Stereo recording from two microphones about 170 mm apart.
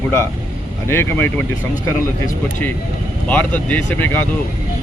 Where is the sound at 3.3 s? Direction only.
5° left (ahead or behind).